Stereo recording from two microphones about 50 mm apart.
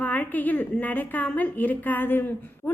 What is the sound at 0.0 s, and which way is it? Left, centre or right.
A woman's voice, left.